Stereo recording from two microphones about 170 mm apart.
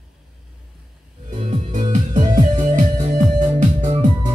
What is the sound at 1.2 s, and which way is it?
Music, 45° right (ahead or behind).